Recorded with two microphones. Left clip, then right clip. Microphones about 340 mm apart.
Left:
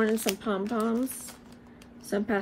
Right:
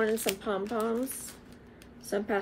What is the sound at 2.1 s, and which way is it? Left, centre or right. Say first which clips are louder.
Speech: left 1 dB; left.